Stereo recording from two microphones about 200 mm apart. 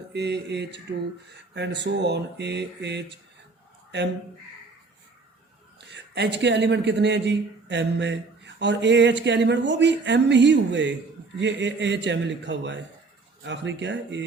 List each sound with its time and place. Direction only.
0.1 s a man's voice: 55° right (ahead or behind)
5.9 s a man's voice: 60° right (ahead or behind)